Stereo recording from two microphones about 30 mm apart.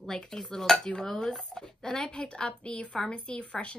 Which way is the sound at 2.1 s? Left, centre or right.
Left.